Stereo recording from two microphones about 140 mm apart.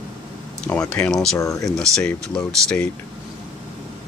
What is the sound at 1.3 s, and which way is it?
Speech, 25° left (ahead or behind).